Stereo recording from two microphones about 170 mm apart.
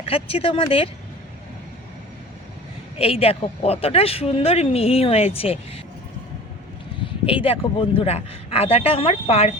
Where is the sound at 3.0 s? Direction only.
35° left (ahead or behind).